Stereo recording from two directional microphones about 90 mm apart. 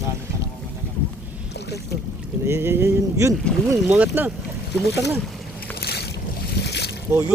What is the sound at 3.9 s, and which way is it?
Speech, 20° right (ahead or behind).